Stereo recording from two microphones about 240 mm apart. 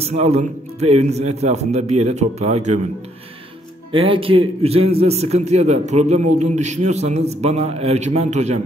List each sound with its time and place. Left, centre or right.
0.0 s a man's voice: right
3.9 s a man's voice: right